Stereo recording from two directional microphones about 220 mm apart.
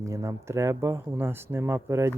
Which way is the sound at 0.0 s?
15° right (ahead or behind).